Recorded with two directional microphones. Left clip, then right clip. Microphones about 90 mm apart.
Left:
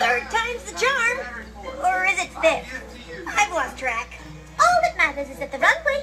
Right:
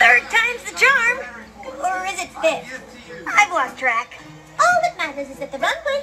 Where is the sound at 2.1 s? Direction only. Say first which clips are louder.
Left 1 dB; 45° right (ahead or behind).